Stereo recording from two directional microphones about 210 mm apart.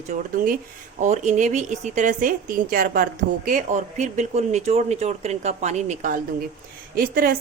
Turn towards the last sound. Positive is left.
turn(degrees=-45)  # may be behind; listen again after turning